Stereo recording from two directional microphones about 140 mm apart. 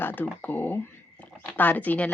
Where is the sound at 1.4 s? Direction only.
10° left (ahead or behind).